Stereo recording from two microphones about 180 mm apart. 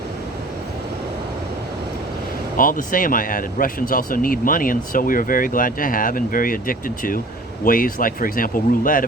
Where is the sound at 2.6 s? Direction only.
50° left (ahead or behind).